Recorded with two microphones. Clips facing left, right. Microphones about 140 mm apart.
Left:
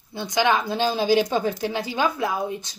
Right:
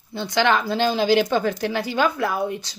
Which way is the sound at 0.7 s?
65° right (ahead or behind).